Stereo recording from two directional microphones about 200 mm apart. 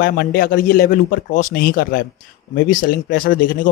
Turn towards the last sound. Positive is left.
turn(degrees=45)  # may be behind; listen again after turning